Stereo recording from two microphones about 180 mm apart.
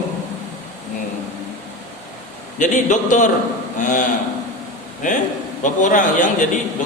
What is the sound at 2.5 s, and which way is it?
A man's voice, 45° left (ahead or behind).